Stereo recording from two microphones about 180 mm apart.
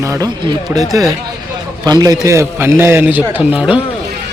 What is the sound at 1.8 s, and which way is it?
A man's voice, 20° right (ahead or behind).